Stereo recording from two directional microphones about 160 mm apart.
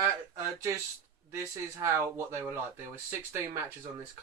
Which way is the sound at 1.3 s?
15° right (ahead or behind).